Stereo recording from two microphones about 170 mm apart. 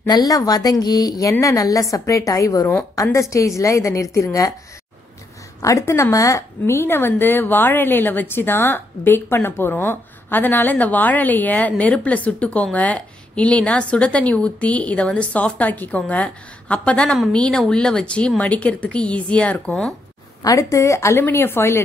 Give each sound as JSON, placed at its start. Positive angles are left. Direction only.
{"t": 0.0, "sound": "a woman's voice", "side_deg": 20}
{"t": 5.6, "sound": "speech", "side_deg": 20}
{"t": 20.4, "sound": "speech", "side_deg": 20}